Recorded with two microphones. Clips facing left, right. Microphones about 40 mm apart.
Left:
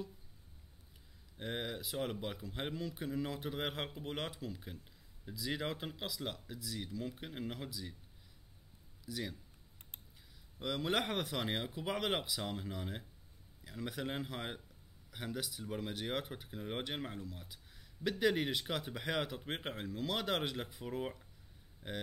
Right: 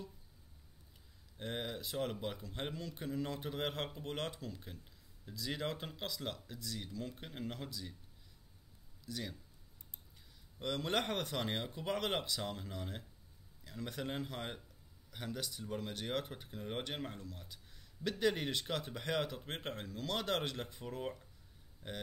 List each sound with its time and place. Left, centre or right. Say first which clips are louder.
1.4 s speech: left 1 dB; centre
9.0 s speech: left 2 dB; centre
10.6 s speech: left 1 dB; centre
21.8 s speech: left 2 dB; left